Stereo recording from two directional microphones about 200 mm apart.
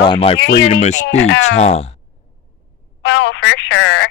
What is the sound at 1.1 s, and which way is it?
Speech, 75° left (ahead or behind).